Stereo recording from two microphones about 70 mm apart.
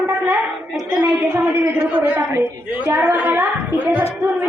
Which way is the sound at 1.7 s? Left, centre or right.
Right.